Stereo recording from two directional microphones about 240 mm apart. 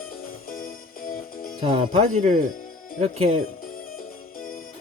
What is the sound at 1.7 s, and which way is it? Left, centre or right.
Speech, right.